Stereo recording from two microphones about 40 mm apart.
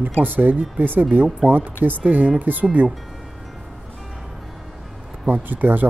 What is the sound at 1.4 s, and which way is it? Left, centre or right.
Speech, centre.